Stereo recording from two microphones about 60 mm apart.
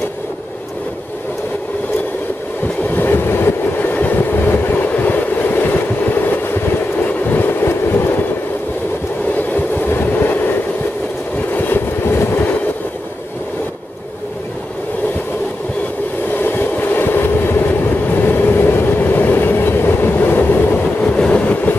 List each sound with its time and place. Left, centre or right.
2.9 s train: left
7.2 s train: left
9.3 s train: left
11.5 s vehicle: left
16.3 s train: left
21.0 s train: centre